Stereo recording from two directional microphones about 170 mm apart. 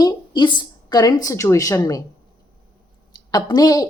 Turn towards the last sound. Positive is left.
turn(degrees=20)  # may be behind; listen again after turning